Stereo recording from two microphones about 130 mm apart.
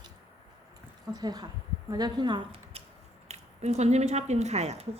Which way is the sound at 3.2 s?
60° right (ahead or behind).